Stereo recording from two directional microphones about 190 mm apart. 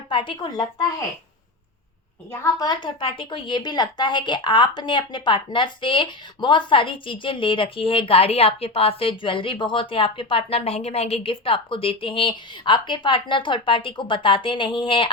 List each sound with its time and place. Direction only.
0.1 s a woman's voice: 25° left (ahead or behind)
2.4 s a woman's voice: 20° left (ahead or behind)